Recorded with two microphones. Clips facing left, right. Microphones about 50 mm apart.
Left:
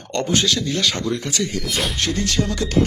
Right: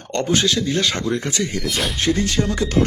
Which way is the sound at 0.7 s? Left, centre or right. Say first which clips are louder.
Right 1 dB; right.